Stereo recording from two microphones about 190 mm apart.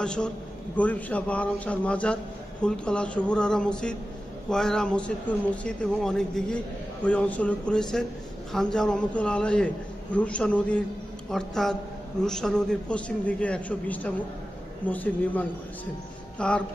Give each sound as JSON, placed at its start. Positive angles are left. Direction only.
{"t": 0.0, "sound": "a man's voice", "side_deg": 5}